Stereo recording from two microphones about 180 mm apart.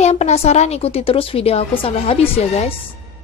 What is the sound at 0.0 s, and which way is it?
A child's voice, 40° left (ahead or behind).